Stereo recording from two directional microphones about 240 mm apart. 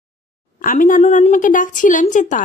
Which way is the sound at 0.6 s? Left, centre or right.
Left.